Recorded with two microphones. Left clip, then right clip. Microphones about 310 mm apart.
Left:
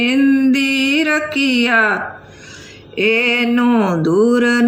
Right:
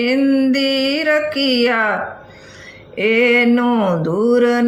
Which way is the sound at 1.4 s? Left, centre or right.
Right.